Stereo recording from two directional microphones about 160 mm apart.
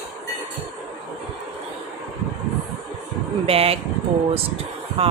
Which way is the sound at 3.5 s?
40° right (ahead or behind).